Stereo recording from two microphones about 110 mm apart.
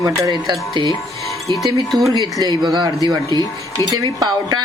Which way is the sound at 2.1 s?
40° right (ahead or behind).